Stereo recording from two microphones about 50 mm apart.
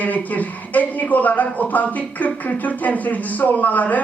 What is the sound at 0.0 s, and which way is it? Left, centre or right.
Speech, left.